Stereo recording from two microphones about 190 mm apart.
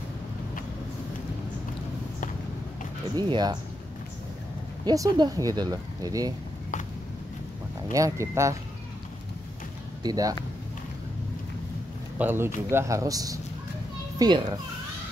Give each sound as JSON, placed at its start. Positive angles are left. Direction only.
{"t": 3.2, "sound": "speech", "side_deg": -20}
{"t": 4.8, "sound": "speech", "side_deg": -20}
{"t": 7.9, "sound": "speech", "side_deg": -15}
{"t": 10.0, "sound": "speech", "side_deg": -20}
{"t": 12.2, "sound": "a child's voice", "side_deg": -10}